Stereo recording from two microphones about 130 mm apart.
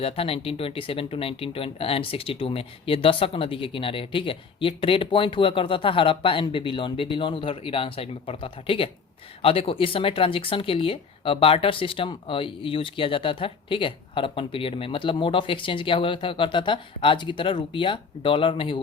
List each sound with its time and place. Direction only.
0.0 s speech: 45° left (ahead or behind)